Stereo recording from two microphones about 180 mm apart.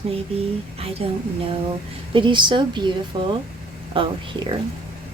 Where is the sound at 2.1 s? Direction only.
25° right (ahead or behind).